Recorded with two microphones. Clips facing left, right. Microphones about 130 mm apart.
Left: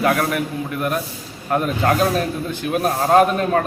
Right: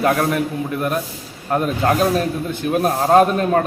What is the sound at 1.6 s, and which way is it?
A man's voice, 20° right (ahead or behind).